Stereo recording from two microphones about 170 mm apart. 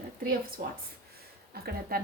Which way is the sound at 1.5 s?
65° right (ahead or behind).